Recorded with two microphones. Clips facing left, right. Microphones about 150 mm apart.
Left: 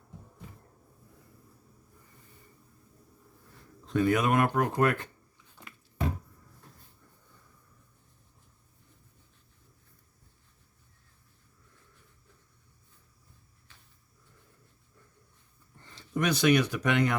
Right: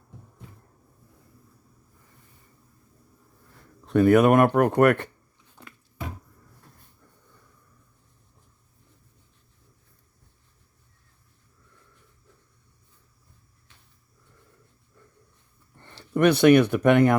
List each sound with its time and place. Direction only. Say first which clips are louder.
3.8 s speech: right 9 dB; 60° right (ahead or behind)
15.8 s speech: right 10 dB; 60° right (ahead or behind)